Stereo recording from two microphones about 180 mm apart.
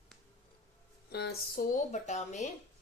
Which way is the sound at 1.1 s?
65° left (ahead or behind).